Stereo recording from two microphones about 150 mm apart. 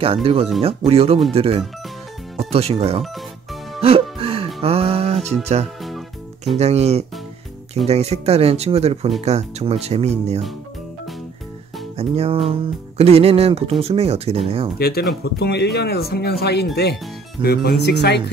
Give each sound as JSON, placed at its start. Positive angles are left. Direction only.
{"t": 0.0, "sound": "speech", "side_deg": -40}
{"t": 3.8, "sound": "music", "side_deg": -40}
{"t": 5.9, "sound": "music", "side_deg": 0}
{"t": 6.5, "sound": "speech", "side_deg": -45}
{"t": 12.0, "sound": "speech", "side_deg": -40}
{"t": 14.8, "sound": "speech", "side_deg": 90}